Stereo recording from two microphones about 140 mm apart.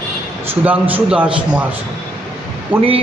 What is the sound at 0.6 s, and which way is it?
A man's voice, 10° right (ahead or behind).